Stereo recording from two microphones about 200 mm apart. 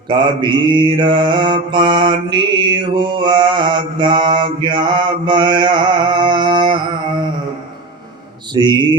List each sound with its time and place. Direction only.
0.1 s mantra: 20° right (ahead or behind)
8.5 s mantra: 20° right (ahead or behind)